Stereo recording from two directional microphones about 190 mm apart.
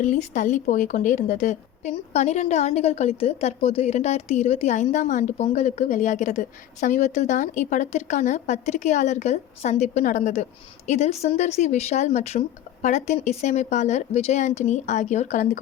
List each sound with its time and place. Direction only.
0.0 s a woman's voice: 40° left (ahead or behind)